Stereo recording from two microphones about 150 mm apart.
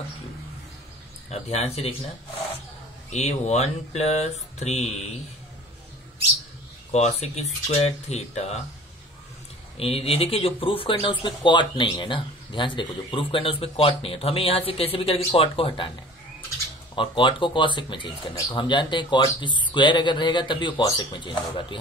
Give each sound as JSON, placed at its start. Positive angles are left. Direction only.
{"t": 1.3, "sound": "speech", "side_deg": 45}
{"t": 3.1, "sound": "speech", "side_deg": 50}
{"t": 6.9, "sound": "speech", "side_deg": 45}
{"t": 9.8, "sound": "speech", "side_deg": 40}
{"t": 16.9, "sound": "speech", "side_deg": 35}